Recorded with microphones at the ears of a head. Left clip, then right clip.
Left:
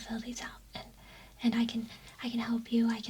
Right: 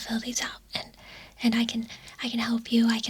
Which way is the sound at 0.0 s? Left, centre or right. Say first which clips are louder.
Right 10 dB; right.